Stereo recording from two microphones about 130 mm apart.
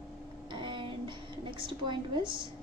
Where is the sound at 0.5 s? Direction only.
40° right (ahead or behind).